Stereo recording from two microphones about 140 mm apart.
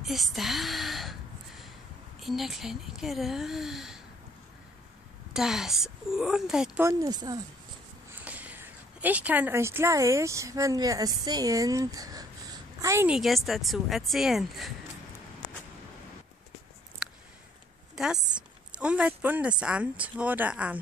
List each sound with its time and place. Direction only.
0.0 s speech: centre (ahead or behind)
2.1 s a woman's voice: centre (ahead or behind)
5.3 s a woman's voice: 5° right (ahead or behind)
6.8 s speech: 25° right (ahead or behind)
8.1 s speech: 10° right (ahead or behind)
13.1 s a woman's voice: centre (ahead or behind)
17.9 s a woman's voice: 5° right (ahead or behind)